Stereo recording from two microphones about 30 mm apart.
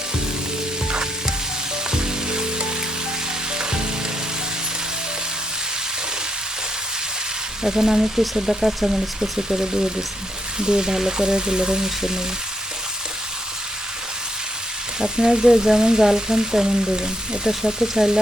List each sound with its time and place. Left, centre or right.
1.9 s music: right
7.6 s speech: centre
10.6 s frying: right
15.0 s frying: right
17.5 s speech: centre